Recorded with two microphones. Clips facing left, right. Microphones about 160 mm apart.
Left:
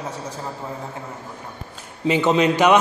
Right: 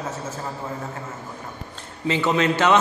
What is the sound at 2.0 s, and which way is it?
Speech, 20° left (ahead or behind).